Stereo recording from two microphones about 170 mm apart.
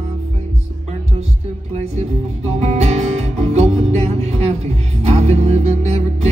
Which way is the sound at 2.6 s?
40° right (ahead or behind).